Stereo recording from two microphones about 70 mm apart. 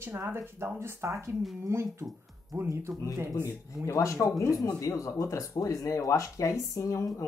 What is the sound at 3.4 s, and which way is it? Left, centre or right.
Speech, left.